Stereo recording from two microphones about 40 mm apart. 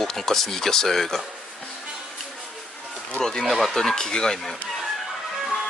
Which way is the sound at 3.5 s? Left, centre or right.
Centre.